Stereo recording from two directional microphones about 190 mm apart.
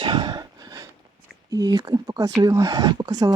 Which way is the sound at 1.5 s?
20° right (ahead or behind).